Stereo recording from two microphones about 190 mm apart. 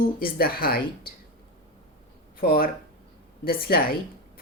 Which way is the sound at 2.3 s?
50° left (ahead or behind).